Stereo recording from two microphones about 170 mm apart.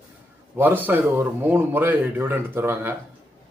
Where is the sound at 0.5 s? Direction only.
10° right (ahead or behind).